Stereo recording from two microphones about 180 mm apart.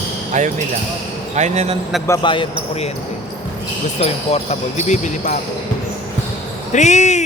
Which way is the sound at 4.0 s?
35° left (ahead or behind).